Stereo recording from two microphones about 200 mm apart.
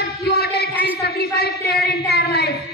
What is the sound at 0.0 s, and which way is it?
Music, 55° left (ahead or behind).